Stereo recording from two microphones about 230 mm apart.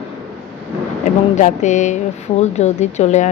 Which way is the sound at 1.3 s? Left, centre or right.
Left.